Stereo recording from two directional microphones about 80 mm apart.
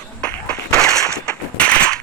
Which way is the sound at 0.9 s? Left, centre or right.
Centre.